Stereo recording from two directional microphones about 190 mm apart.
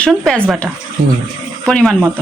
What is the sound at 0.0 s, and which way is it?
Speech, 5° left (ahead or behind).